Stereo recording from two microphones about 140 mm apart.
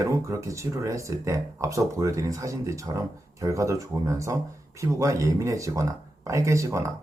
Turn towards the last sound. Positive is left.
turn(degrees=-20)  # may be behind; listen again after turning